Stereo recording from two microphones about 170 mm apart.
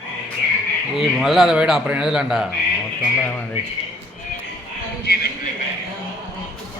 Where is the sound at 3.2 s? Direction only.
10° left (ahead or behind).